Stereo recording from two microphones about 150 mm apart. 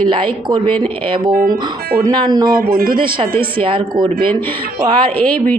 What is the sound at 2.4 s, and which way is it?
Speech, 90° right.